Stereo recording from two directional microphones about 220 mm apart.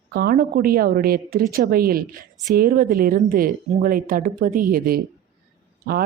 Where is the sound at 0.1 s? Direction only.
45° right (ahead or behind).